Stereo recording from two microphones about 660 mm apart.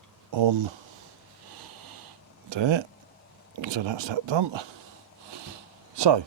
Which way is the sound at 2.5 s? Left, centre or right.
Right.